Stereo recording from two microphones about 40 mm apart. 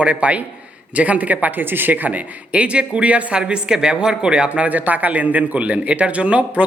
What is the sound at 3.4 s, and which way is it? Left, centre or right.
A man's voice, right.